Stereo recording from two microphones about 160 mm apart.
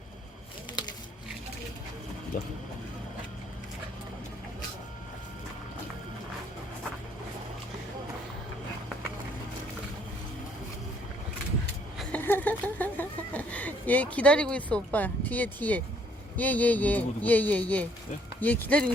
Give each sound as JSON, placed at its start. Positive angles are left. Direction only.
{"t": 2.3, "sound": "speech", "side_deg": 60}
{"t": 12.1, "sound": "chicken", "side_deg": 10}
{"t": 16.4, "sound": "speech", "side_deg": 10}